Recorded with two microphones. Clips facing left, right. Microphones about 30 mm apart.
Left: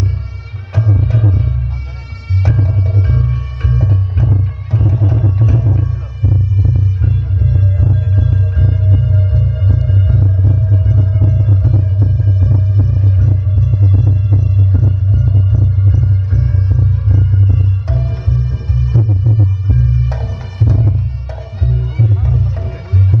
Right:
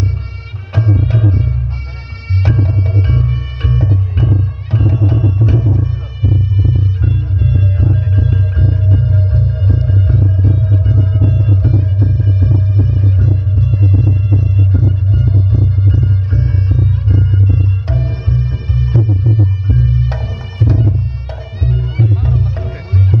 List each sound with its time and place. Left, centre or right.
0.7 s music: right
2.4 s music: right
7.4 s music: right
20.6 s music: right
21.6 s music: right